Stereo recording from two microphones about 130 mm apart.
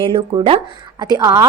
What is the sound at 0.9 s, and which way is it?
Speech, 30° right (ahead or behind).